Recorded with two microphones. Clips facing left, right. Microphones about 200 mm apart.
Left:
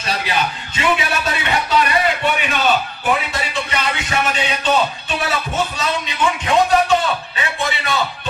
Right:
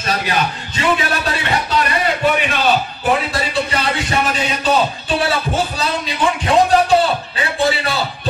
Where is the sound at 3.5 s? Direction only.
35° right (ahead or behind).